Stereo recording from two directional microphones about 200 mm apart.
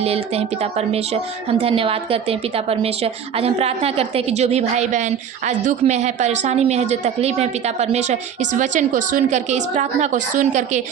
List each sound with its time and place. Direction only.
0.0 s a woman's voice: 30° right (ahead or behind)